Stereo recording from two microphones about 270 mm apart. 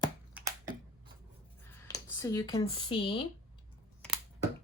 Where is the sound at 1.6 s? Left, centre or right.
Centre.